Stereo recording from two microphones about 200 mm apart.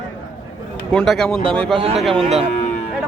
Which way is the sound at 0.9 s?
Centre (ahead or behind).